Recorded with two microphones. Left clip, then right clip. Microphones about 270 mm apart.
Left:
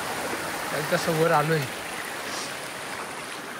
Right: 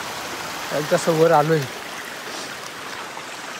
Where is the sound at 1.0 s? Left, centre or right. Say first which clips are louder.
Right 7 dB; centre.